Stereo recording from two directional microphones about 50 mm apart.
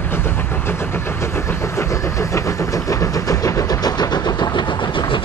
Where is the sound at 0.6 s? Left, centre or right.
Left.